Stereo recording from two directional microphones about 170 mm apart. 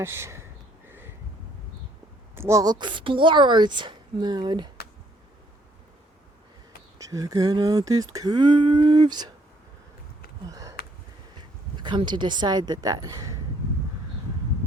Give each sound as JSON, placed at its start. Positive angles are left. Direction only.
{"t": 0.0, "sound": "speech", "side_deg": -15}
{"t": 0.9, "sound": "a sound", "side_deg": -10}
{"t": 2.3, "sound": "a woman's voice", "side_deg": -15}
{"t": 7.0, "sound": "a woman's voice", "side_deg": -20}
{"t": 10.4, "sound": "a sound", "side_deg": -20}
{"t": 11.3, "sound": "speech", "side_deg": -25}